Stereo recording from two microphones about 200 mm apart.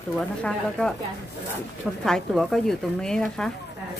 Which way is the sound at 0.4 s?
5° left (ahead or behind).